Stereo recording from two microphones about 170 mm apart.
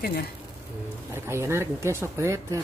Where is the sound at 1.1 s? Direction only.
15° right (ahead or behind).